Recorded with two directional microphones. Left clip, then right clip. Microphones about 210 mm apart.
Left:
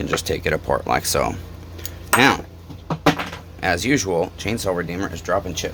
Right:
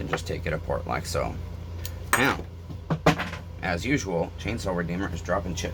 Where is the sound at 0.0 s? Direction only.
45° left (ahead or behind).